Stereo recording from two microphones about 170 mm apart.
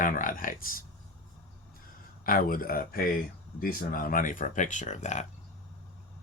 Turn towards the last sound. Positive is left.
turn(degrees=45)  # may be behind; listen again after turning